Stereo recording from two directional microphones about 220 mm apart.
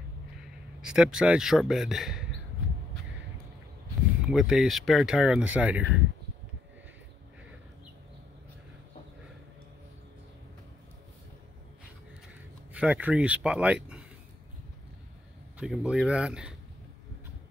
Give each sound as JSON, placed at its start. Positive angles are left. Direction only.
{"t": 0.7, "sound": "speech", "side_deg": -5}
{"t": 4.3, "sound": "speech", "side_deg": 0}
{"t": 12.7, "sound": "speech", "side_deg": -5}
{"t": 15.5, "sound": "speech", "side_deg": -5}